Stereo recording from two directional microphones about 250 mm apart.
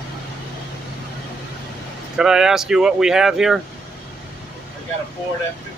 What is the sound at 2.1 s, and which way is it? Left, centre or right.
Speech, centre.